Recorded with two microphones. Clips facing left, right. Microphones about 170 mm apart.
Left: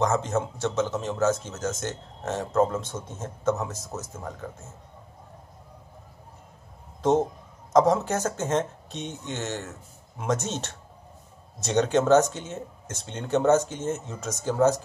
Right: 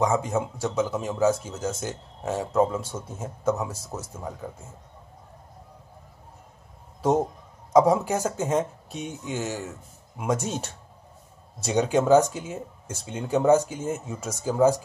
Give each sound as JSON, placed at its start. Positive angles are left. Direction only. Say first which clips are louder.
{"t": 0.0, "sound": "speech", "louder": "right 1 dB", "side_deg": -10}
{"t": 7.0, "sound": "speech", "louder": "left 1 dB", "side_deg": -10}